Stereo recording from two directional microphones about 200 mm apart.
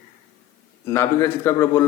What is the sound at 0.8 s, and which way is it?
Speech, 15° left (ahead or behind).